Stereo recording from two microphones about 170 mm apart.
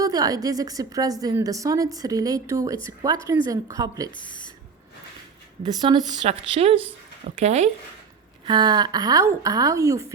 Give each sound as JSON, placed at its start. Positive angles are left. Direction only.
{"t": 0.0, "sound": "a woman's voice", "side_deg": -20}
{"t": 4.1, "sound": "speech", "side_deg": 25}
{"t": 5.9, "sound": "speech", "side_deg": -30}
{"t": 8.4, "sound": "a woman's voice", "side_deg": -25}